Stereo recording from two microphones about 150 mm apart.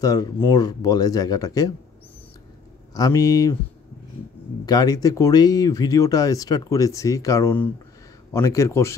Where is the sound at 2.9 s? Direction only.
25° left (ahead or behind).